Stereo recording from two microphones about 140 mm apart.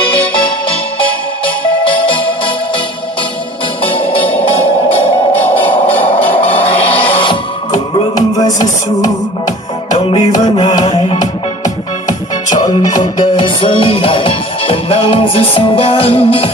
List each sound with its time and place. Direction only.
0.0 s music: 35° left (ahead or behind)
3.8 s music: 40° left (ahead or behind)
5.5 s a sound: 10° left (ahead or behind)
6.2 s music: 10° left (ahead or behind)
6.5 s a sound: 40° left (ahead or behind)
7.1 s music: 35° left (ahead or behind)
9.9 s music: 35° left (ahead or behind)
12.5 s music: 30° left (ahead or behind)